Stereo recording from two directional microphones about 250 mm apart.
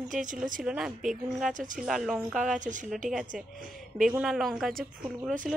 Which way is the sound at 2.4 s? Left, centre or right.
Right.